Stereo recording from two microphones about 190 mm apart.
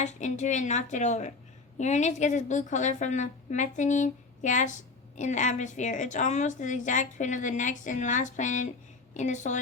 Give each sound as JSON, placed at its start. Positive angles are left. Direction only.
{"t": 0.0, "sound": "a woman's voice", "side_deg": 40}